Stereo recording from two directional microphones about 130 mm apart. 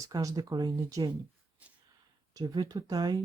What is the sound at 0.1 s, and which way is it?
Speech, 25° right (ahead or behind).